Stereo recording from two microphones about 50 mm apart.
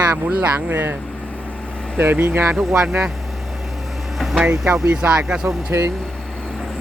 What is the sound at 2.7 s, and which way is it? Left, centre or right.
Speech, centre.